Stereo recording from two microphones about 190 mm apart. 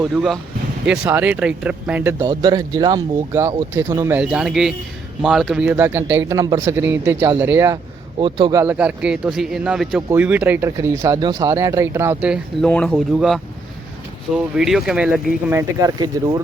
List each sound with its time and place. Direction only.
0.0 s a man's voice: 5° right (ahead or behind)
4.2 s a man's voice: 5° right (ahead or behind)
8.2 s speech: 25° right (ahead or behind)
8.6 s a man's voice: 10° right (ahead or behind)
12.6 s a man's voice: 5° left (ahead or behind); by 16.4 s 20° right (ahead or behind)